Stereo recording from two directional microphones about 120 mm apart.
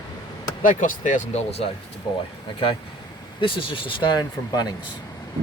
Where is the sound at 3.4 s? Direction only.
45° left (ahead or behind).